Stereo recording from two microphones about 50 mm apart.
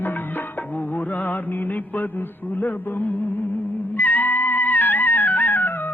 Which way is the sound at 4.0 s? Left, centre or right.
Left.